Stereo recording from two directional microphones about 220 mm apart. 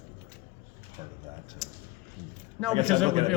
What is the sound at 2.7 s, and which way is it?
Speech, 25° right (ahead or behind).